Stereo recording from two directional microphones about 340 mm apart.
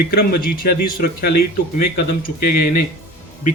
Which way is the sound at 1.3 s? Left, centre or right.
Left.